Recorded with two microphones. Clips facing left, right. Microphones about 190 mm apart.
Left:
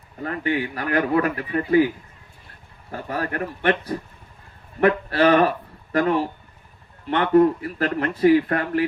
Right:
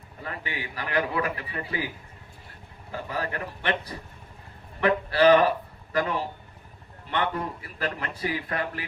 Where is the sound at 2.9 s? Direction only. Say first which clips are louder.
Left 5 dB; 50° left (ahead or behind).